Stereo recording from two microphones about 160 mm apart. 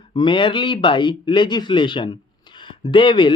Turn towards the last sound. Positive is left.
turn(degrees=30)  # may be behind; listen again after turning